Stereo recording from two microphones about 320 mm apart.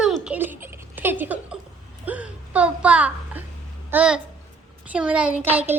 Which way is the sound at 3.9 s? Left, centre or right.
Centre.